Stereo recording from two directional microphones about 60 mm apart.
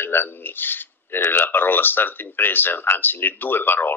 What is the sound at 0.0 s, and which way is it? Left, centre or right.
Speech, left.